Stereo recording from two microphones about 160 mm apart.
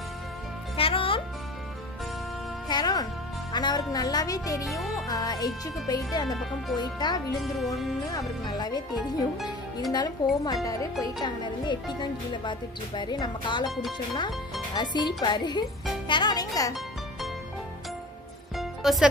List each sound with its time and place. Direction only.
0.7 s music: 35° left (ahead or behind)
2.7 s music: 25° left (ahead or behind)
3.5 s speech: 25° left (ahead or behind)
4.6 s music: centre (ahead or behind)
5.0 s speech: 25° left (ahead or behind)
7.5 s music: centre (ahead or behind)
8.1 s speech: 25° left (ahead or behind)
9.9 s speech: 25° left (ahead or behind)
18.6 s music: centre (ahead or behind)